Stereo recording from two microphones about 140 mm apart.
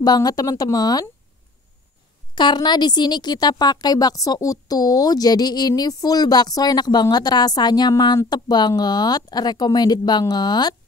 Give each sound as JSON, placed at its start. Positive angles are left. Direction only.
{"t": 0.0, "sound": "a woman's voice", "side_deg": 30}
{"t": 2.3, "sound": "a woman's voice", "side_deg": 30}